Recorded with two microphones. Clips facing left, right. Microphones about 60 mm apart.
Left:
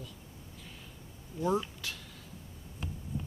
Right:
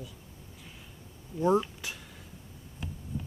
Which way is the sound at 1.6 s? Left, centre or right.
Centre.